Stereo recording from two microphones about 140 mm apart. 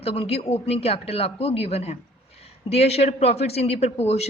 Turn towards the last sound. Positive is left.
turn(degrees=50)  # may be behind; listen again after turning